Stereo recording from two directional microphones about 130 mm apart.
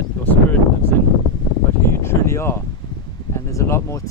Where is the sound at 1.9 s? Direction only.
20° left (ahead or behind).